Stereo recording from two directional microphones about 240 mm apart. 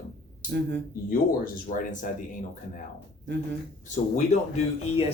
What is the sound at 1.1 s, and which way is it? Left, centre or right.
Speech, left.